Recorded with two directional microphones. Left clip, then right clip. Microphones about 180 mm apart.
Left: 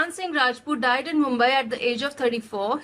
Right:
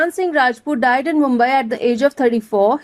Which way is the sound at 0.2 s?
50° right (ahead or behind).